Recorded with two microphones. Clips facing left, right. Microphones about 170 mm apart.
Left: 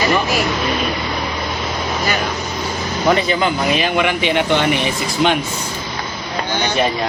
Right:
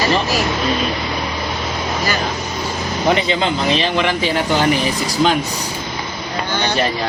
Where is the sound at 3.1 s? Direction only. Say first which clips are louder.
Left 1 dB; 25° right (ahead or behind).